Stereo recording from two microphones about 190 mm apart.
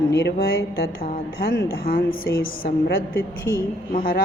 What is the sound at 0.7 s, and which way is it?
A woman's voice, 50° left (ahead or behind).